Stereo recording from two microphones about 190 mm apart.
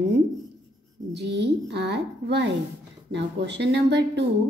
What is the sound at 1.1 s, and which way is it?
A woman's voice, 65° right (ahead or behind).